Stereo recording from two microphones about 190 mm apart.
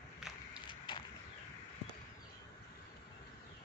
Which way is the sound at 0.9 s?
25° left (ahead or behind).